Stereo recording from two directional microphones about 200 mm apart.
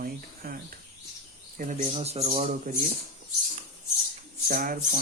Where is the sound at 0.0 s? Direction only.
45° right (ahead or behind).